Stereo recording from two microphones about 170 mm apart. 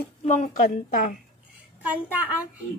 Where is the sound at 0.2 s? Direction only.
45° left (ahead or behind).